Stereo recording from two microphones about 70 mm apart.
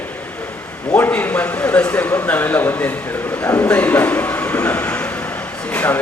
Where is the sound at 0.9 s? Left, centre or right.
Left.